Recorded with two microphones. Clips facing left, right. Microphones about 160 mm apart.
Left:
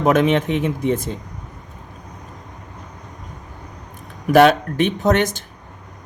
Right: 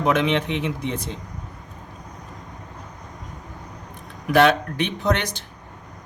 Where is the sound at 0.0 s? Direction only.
45° left (ahead or behind).